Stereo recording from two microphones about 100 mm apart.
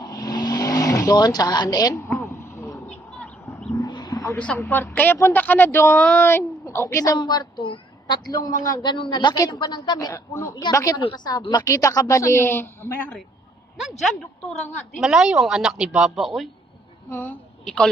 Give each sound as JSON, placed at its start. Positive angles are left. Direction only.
{"t": 0.0, "sound": "vehicle", "side_deg": 45}
{"t": 2.0, "sound": "a sound", "side_deg": 25}
{"t": 3.8, "sound": "wild animals", "side_deg": 45}
{"t": 4.4, "sound": "speech", "side_deg": 15}
{"t": 7.2, "sound": "a woman's voice", "side_deg": 45}
{"t": 8.0, "sound": "a woman's voice", "side_deg": 40}
{"t": 13.7, "sound": "a woman's voice", "side_deg": 0}
{"t": 17.1, "sound": "speech", "side_deg": 20}